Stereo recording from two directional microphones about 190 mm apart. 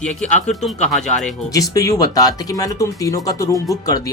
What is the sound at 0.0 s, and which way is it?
Speech, 5° left (ahead or behind).